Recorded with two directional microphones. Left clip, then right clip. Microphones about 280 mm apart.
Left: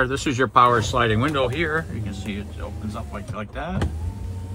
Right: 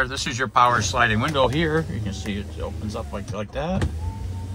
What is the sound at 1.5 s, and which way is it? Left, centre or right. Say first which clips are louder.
Speech: right 1 dB; right.